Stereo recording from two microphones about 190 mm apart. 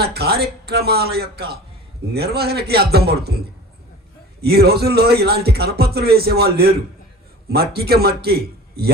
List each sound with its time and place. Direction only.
0.0 s a man's voice: 55° right (ahead or behind)
4.4 s a man's voice: 55° right (ahead or behind)